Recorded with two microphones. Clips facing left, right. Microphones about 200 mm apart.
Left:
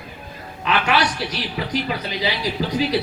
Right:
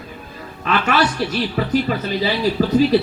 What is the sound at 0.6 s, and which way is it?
Speech, 45° right (ahead or behind).